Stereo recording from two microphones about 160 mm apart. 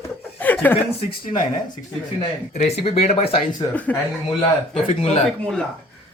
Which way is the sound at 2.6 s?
40° left (ahead or behind).